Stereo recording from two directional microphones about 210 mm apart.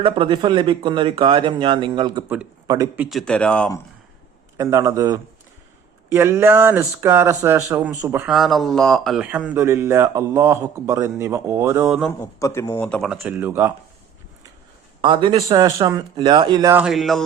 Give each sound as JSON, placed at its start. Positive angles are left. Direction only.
{"t": 0.0, "sound": "speech", "side_deg": -25}
{"t": 4.5, "sound": "speech", "side_deg": -15}
{"t": 11.9, "sound": "speech", "side_deg": 0}
{"t": 12.4, "sound": "speech", "side_deg": 15}
{"t": 13.1, "sound": "speech", "side_deg": -5}
{"t": 15.0, "sound": "speech", "side_deg": -25}
{"t": 16.7, "sound": "speech", "side_deg": 0}